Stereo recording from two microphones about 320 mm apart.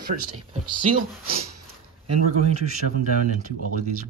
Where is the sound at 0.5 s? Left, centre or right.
Right.